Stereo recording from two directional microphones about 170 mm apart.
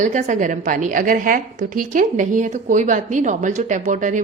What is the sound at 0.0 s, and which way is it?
A woman's voice, 45° right (ahead or behind).